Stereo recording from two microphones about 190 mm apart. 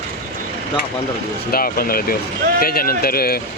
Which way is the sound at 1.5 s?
50° left (ahead or behind).